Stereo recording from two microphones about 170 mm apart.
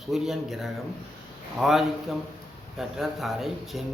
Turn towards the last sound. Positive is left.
turn(degrees=0)  # may be behind; listen again after turning